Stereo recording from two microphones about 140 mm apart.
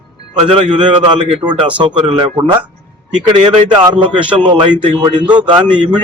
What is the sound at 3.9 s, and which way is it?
A man's voice, 35° right (ahead or behind).